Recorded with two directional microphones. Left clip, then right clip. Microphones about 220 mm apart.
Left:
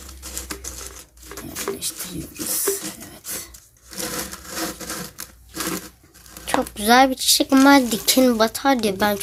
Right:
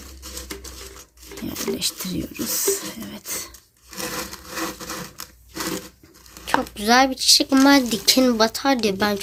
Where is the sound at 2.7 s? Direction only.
40° right (ahead or behind).